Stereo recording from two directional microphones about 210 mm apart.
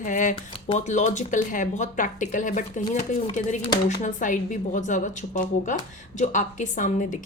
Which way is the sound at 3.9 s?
40° left (ahead or behind).